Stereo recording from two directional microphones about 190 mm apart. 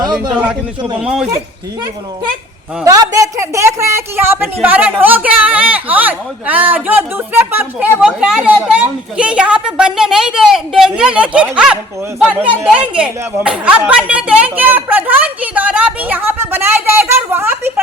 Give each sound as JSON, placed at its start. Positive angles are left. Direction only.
{"t": 0.0, "sound": "a man's voice", "side_deg": -20}
{"t": 1.0, "sound": "speech", "side_deg": -5}
{"t": 2.8, "sound": "speech", "side_deg": -20}